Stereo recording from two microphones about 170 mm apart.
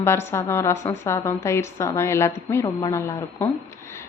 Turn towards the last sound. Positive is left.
turn(degrees=15)  # may be behind; listen again after turning